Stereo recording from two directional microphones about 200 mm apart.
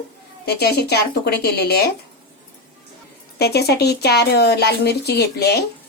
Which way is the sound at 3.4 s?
55° left (ahead or behind).